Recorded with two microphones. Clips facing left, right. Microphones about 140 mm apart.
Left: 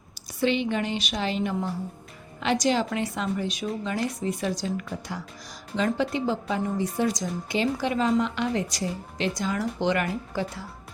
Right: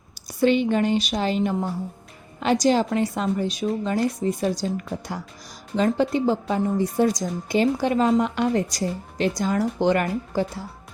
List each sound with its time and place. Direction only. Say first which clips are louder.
0.3 s speech: right 5 dB; 45° right (ahead or behind)